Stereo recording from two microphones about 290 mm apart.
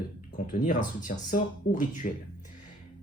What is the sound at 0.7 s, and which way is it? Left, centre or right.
Speech, left.